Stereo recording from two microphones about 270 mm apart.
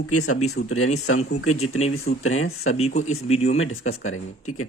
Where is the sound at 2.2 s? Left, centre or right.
Left.